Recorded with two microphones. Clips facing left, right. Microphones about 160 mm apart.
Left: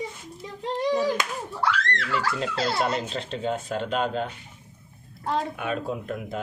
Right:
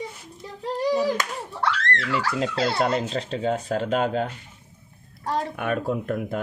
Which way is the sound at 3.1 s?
40° right (ahead or behind).